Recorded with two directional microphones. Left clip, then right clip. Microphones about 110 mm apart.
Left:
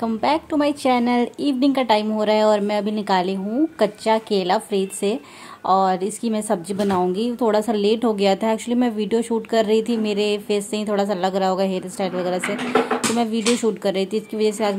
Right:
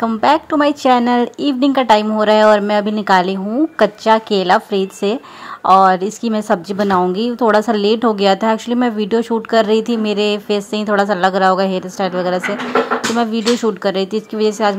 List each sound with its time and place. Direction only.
0.0 s speech: 15° right (ahead or behind)